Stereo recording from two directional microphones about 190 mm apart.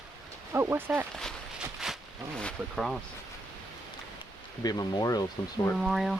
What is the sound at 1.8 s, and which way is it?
Speech, centre (ahead or behind).